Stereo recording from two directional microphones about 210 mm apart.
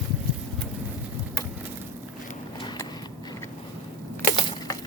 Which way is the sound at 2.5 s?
20° left (ahead or behind).